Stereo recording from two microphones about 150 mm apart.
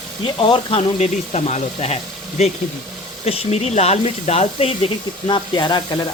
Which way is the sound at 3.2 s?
45° left (ahead or behind).